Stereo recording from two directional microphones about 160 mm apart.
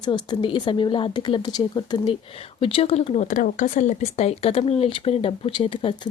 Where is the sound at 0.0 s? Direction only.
30° left (ahead or behind).